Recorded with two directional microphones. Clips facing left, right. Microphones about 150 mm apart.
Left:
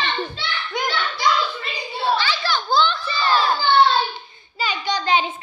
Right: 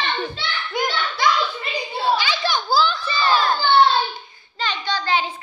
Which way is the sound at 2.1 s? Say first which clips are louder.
Even; 15° right (ahead or behind).